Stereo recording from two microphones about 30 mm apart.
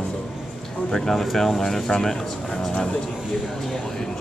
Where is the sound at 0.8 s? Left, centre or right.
Centre.